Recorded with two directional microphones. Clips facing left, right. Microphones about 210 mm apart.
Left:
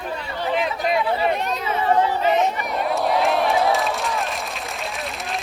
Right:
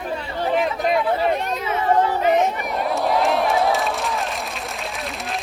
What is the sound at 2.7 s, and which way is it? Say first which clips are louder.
Crowd: right 1 dB; centre (ahead or behind).